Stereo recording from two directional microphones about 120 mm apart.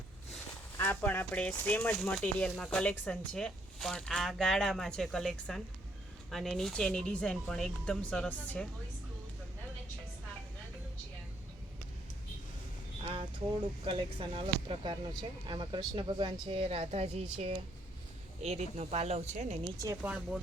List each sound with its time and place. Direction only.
0.8 s speech: 15° left (ahead or behind)
13.8 s speech: 45° right (ahead or behind)
18.4 s speech: 65° right (ahead or behind)
20.0 s speech: 10° right (ahead or behind)